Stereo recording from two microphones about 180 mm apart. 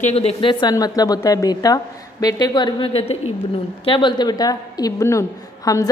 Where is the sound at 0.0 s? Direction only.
35° left (ahead or behind).